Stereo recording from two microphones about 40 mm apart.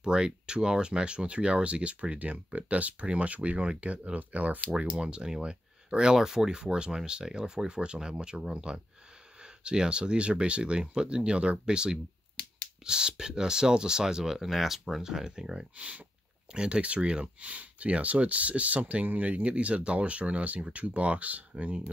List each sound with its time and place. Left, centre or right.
0.0 s speech: right
4.8 s speech: right